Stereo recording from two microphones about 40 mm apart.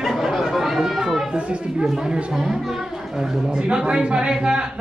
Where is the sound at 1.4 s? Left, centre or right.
Right.